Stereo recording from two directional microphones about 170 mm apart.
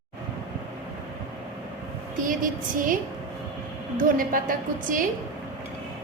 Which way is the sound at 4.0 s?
55° right (ahead or behind).